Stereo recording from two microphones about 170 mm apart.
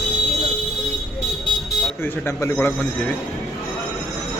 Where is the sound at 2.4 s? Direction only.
15° left (ahead or behind).